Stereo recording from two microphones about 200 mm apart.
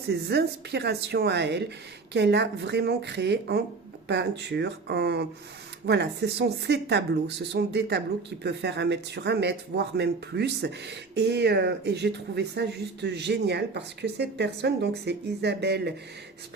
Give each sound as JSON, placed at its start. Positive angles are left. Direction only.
{"t": 0.1, "sound": "speech", "side_deg": -55}